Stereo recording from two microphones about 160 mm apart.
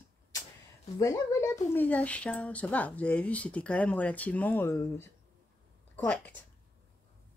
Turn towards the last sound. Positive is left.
turn(degrees=10)  # may be behind; listen again after turning